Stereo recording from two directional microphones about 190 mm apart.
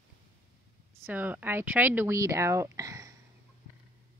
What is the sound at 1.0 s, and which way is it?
Speech, 10° right (ahead or behind).